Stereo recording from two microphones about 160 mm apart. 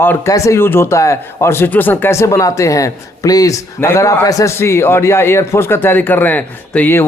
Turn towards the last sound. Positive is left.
turn(degrees=10)  # may be behind; listen again after turning